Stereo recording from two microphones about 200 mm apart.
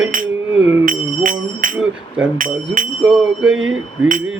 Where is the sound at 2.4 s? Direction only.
40° right (ahead or behind).